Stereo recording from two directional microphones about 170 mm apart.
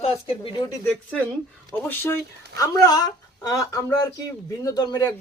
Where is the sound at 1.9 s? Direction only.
15° left (ahead or behind).